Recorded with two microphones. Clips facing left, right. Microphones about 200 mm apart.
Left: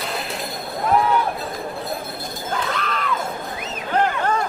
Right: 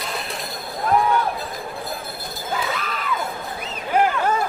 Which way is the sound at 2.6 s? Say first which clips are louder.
Left 3 dB; 5° right (ahead or behind).